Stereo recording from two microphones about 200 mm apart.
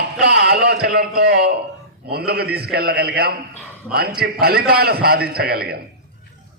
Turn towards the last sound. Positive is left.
turn(degrees=-50)  # may be behind; listen again after turning